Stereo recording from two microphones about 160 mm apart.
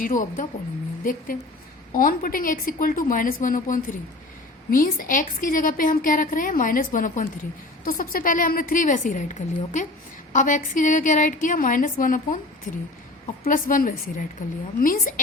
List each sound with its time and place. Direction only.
0.0 s a woman's voice: 55° left (ahead or behind)
1.9 s a woman's voice: 60° left (ahead or behind)